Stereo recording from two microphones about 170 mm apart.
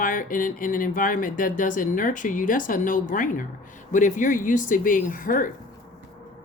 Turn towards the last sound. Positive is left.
turn(degrees=55)  # may be behind; listen again after turning